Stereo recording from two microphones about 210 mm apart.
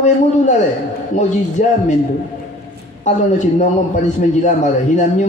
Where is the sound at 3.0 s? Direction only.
35° left (ahead or behind).